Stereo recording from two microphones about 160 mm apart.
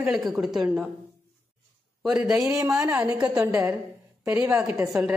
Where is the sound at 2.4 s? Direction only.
20° right (ahead or behind).